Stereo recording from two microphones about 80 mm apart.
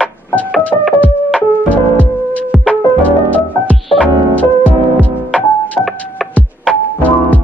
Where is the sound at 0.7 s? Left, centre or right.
Left.